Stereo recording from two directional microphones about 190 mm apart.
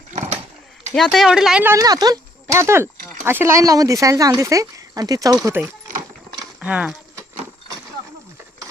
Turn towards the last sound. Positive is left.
turn(degrees=-5)  # may be behind; listen again after turning